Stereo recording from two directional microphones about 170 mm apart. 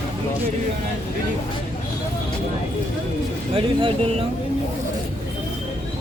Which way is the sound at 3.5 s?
30° right (ahead or behind).